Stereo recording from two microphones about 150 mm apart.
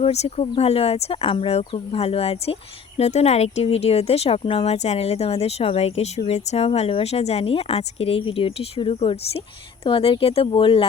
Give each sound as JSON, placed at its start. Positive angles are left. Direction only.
{"t": 0.0, "sound": "speech", "side_deg": 45}